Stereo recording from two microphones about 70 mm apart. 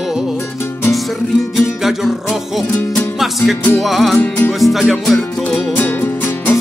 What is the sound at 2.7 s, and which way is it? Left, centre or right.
Music, left.